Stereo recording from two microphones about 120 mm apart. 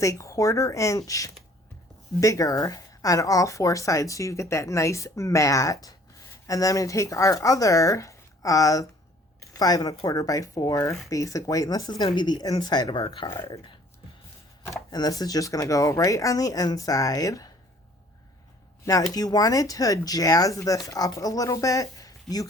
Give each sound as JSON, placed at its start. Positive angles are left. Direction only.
{"t": 0.0, "sound": "a woman's voice", "side_deg": 25}
{"t": 13.2, "sound": "a woman's voice", "side_deg": 20}
{"t": 14.7, "sound": "a woman's voice", "side_deg": 30}
{"t": 19.1, "sound": "a woman's voice", "side_deg": 30}